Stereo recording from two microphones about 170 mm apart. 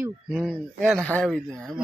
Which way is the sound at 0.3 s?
Centre (ahead or behind).